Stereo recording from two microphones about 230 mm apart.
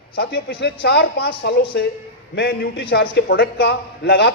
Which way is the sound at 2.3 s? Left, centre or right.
Left.